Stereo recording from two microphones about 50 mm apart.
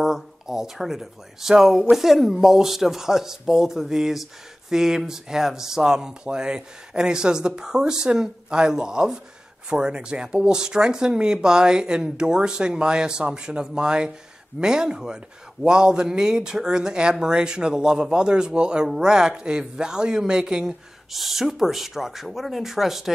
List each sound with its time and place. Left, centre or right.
0.0 s speech: centre